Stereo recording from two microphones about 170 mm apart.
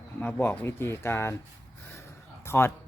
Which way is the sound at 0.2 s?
10° left (ahead or behind).